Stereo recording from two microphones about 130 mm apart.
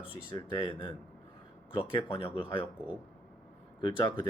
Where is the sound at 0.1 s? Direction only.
35° left (ahead or behind).